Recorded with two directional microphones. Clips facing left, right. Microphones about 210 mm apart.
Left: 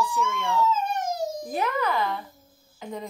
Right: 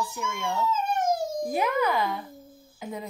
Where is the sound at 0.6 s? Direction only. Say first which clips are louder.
Right 1 dB; 50° right (ahead or behind).